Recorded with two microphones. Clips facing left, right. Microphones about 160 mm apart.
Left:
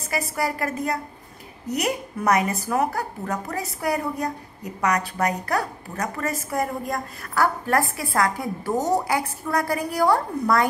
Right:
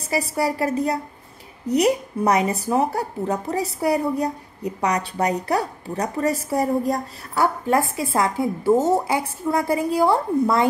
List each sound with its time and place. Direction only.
0.1 s a woman's voice: 30° right (ahead or behind)